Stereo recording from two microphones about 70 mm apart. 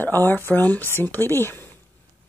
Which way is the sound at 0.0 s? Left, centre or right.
Left.